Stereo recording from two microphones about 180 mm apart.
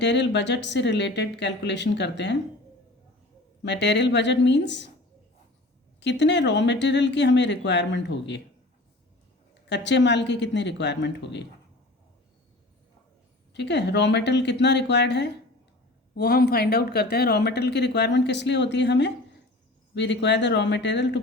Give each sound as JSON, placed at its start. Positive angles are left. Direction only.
{"t": 0.0, "sound": "speech", "side_deg": 75}
{"t": 3.6, "sound": "speech", "side_deg": 75}
{"t": 6.0, "sound": "speech", "side_deg": 75}
{"t": 9.6, "sound": "speech", "side_deg": 75}
{"t": 13.5, "sound": "speech", "side_deg": 75}